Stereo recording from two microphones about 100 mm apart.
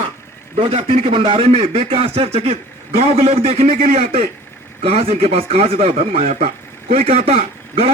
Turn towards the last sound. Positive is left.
turn(degrees=-85)